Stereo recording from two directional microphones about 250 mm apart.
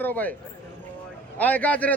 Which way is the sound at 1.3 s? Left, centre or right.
Centre.